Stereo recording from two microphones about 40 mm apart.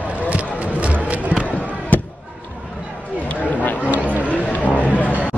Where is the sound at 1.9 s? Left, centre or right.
Left.